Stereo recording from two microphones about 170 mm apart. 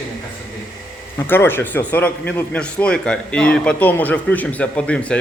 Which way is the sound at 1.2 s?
15° left (ahead or behind).